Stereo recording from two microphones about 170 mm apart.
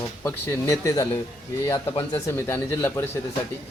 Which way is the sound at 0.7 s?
15° left (ahead or behind).